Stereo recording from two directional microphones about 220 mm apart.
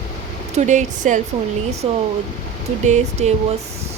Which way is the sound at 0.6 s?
35° right (ahead or behind).